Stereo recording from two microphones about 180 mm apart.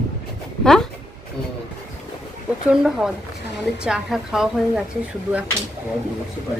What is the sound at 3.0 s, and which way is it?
Speech, centre (ahead or behind).